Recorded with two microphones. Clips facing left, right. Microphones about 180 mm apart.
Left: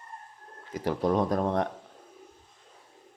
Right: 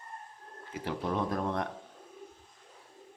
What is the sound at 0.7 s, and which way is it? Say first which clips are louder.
Speech: left 7 dB; 40° left (ahead or behind).